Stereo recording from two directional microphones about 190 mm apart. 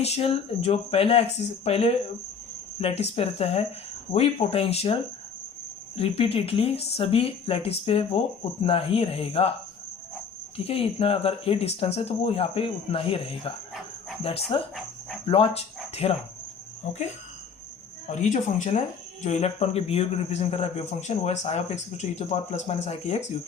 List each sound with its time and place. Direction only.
0.0 s speech: 30° left (ahead or behind)
6.0 s speech: 30° left (ahead or behind)
10.7 s speech: 30° left (ahead or behind)
18.1 s speech: 40° left (ahead or behind)